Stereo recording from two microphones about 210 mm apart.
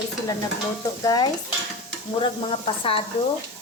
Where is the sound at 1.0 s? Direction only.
15° left (ahead or behind).